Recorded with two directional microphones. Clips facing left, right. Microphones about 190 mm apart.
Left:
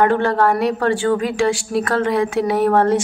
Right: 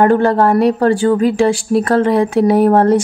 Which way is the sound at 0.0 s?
40° right (ahead or behind).